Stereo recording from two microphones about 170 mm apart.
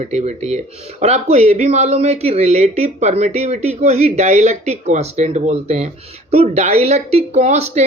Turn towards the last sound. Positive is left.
turn(degrees=-40)  # may be behind; listen again after turning